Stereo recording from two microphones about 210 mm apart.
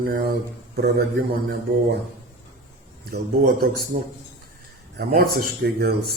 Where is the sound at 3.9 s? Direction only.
35° right (ahead or behind).